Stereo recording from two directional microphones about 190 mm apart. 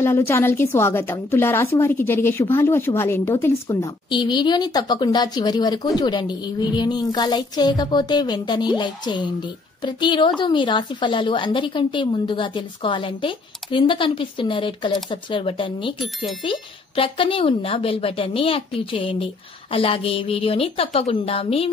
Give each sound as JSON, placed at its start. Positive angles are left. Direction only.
{"t": 0.0, "sound": "a woman's voice", "side_deg": 15}